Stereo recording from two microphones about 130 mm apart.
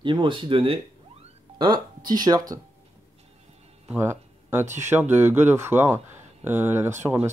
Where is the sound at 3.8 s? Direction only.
20° right (ahead or behind).